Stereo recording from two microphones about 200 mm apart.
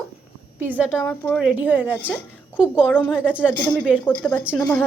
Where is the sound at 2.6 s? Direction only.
5° right (ahead or behind).